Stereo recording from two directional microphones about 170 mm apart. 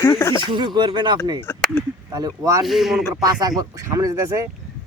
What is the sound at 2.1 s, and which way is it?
Speech, 20° right (ahead or behind).